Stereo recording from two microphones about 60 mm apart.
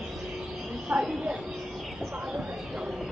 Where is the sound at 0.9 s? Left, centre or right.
Right.